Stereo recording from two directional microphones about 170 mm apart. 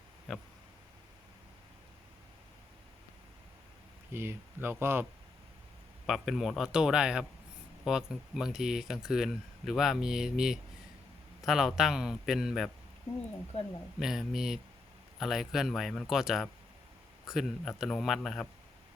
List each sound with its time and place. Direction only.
4.1 s speech: 15° right (ahead or behind)
6.1 s speech: centre (ahead or behind)
13.5 s speech: 40° left (ahead or behind)
14.0 s speech: centre (ahead or behind)